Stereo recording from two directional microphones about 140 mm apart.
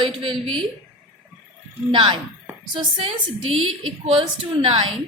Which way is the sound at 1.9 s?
35° right (ahead or behind).